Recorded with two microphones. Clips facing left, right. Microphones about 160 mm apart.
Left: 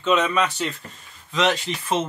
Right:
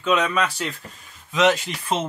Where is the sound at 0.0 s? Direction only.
Centre (ahead or behind).